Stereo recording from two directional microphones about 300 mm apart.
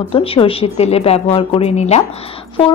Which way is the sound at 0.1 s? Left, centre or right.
Centre.